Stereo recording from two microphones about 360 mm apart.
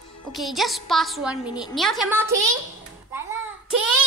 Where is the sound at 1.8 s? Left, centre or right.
Centre.